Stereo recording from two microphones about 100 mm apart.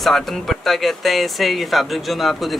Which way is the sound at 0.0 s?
Centre (ahead or behind).